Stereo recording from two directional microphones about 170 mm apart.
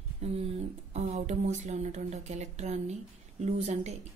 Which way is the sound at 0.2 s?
40° right (ahead or behind).